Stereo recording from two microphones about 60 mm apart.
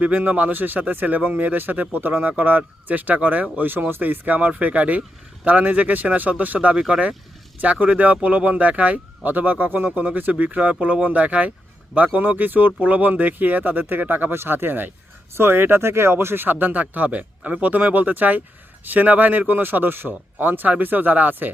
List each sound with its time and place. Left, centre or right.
0.0 s speech: right
3.6 s speech: right
6.7 s speech: centre
7.6 s speech: right